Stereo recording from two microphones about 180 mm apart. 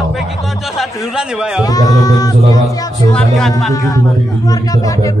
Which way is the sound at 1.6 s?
20° left (ahead or behind).